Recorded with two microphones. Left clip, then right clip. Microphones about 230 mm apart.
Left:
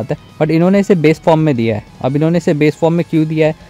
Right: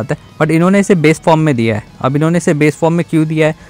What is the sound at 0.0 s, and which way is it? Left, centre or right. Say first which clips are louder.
Speech: right 1 dB; centre.